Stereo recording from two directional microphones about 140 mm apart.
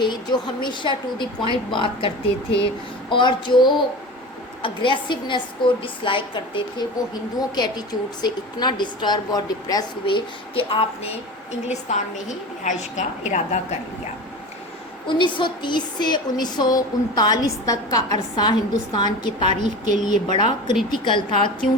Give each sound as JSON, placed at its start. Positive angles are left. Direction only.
{"t": 0.0, "sound": "a woman's voice", "side_deg": 35}
{"t": 11.7, "sound": "a woman's voice", "side_deg": 60}
{"t": 15.0, "sound": "a woman's voice", "side_deg": 35}
{"t": 19.5, "sound": "a woman's voice", "side_deg": -60}
{"t": 20.0, "sound": "a woman's voice", "side_deg": 30}